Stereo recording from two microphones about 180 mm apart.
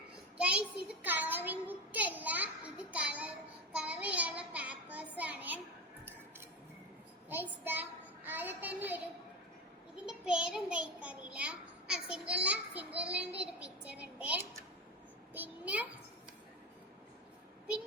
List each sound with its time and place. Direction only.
0.3 s a sound: 5° right (ahead or behind)
3.8 s child singing: 5° right (ahead or behind)
7.3 s a child's voice: 10° right (ahead or behind)